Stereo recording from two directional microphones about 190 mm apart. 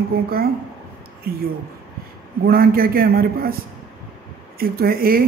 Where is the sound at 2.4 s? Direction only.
50° right (ahead or behind).